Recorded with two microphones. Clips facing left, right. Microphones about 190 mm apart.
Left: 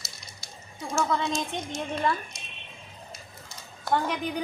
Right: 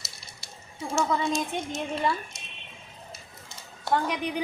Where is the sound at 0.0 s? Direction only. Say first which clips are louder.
Left 1 dB; 5° right (ahead or behind).